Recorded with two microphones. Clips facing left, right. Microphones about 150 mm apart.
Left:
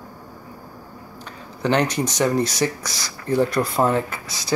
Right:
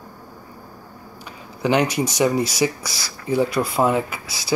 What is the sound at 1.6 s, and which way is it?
Speech, 10° right (ahead or behind).